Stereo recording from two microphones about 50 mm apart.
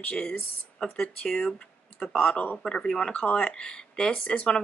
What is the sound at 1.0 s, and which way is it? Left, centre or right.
A woman's voice, centre.